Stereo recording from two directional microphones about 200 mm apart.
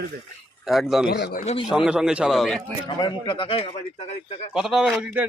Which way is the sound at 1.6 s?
5° right (ahead or behind).